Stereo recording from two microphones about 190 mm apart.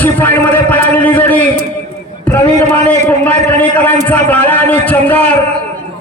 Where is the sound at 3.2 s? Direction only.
10° left (ahead or behind).